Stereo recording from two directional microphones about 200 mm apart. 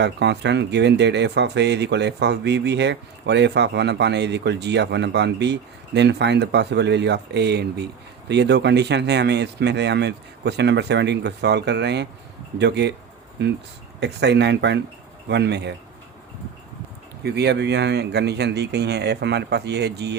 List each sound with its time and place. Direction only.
0.0 s speech: 60° right (ahead or behind)
17.2 s speech: 55° right (ahead or behind)